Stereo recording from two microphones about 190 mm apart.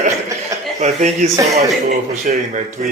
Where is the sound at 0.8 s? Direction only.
35° right (ahead or behind).